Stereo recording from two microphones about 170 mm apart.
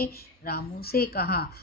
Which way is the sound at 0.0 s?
65° left (ahead or behind).